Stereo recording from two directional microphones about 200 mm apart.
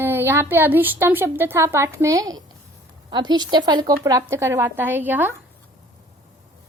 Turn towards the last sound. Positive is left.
turn(degrees=-10)  # may be behind; listen again after turning